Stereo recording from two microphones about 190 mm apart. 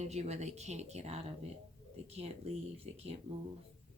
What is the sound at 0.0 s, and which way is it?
Speech, 35° right (ahead or behind).